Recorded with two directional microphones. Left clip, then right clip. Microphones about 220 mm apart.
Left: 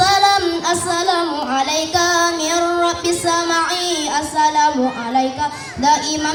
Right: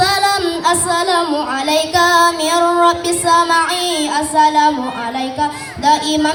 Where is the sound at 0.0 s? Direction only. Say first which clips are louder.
Left 1 dB; 25° right (ahead or behind).